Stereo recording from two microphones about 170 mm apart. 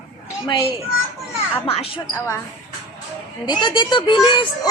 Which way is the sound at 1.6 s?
35° left (ahead or behind).